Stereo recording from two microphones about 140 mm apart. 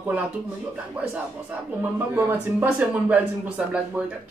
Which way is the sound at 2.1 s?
20° right (ahead or behind).